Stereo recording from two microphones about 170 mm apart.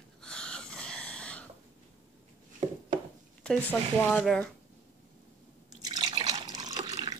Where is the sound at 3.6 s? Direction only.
10° left (ahead or behind).